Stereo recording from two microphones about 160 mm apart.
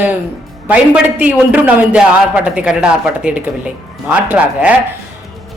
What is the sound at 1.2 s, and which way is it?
A man's voice, 10° right (ahead or behind).